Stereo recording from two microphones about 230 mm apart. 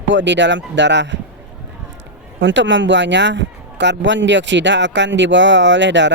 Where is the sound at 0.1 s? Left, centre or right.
Right.